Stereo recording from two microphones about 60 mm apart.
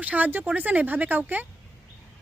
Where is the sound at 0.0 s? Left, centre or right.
Right.